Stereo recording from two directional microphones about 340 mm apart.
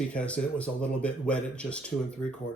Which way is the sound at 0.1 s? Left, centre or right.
Centre.